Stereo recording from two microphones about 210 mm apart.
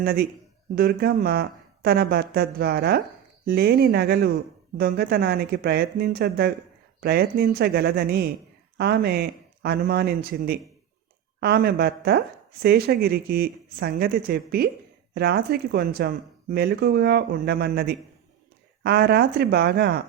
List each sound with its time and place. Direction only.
0.0 s speech: 45° right (ahead or behind)